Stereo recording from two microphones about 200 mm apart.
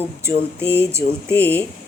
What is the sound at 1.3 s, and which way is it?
Speech, 10° left (ahead or behind).